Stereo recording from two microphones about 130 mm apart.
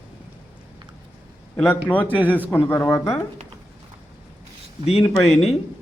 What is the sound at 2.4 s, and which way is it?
Speech, 15° left (ahead or behind).